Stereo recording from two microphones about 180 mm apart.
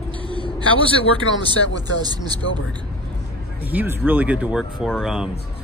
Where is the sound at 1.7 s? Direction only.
20° right (ahead or behind).